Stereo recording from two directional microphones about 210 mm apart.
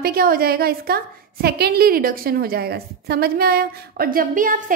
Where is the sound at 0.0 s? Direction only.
45° right (ahead or behind).